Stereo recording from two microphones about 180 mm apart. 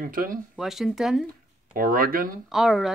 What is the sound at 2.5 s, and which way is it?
Speech, centre (ahead or behind).